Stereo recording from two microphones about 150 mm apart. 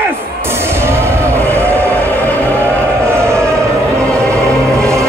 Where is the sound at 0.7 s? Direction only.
15° right (ahead or behind).